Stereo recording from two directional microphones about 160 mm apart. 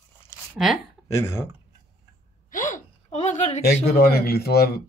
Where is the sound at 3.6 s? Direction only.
75° left (ahead or behind).